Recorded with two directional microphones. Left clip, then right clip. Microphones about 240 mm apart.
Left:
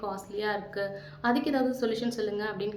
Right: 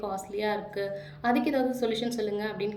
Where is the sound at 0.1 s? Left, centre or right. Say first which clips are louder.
Right 1 dB; centre.